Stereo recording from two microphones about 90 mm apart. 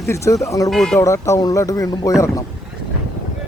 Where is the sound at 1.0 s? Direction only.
35° left (ahead or behind).